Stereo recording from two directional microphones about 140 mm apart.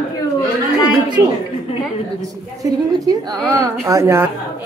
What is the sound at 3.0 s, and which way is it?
A woman's voice, 25° right (ahead or behind).